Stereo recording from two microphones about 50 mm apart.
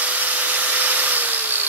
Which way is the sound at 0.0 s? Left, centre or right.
Right.